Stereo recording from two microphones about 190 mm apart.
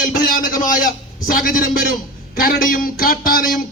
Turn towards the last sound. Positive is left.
turn(degrees=50)  # may be behind; listen again after turning